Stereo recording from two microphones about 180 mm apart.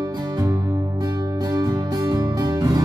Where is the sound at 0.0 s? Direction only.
20° right (ahead or behind).